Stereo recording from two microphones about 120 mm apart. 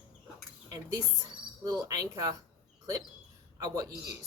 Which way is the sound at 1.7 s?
30° right (ahead or behind).